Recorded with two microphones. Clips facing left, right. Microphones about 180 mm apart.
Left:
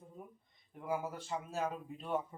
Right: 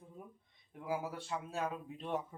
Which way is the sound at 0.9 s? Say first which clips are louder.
Left 1 dB; centre (ahead or behind).